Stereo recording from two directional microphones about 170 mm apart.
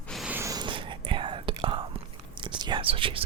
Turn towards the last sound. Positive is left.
turn(degrees=-30)  # may be behind; listen again after turning